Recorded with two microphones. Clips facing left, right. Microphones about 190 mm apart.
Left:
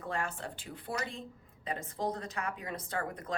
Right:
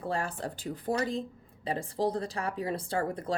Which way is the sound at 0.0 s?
35° right (ahead or behind).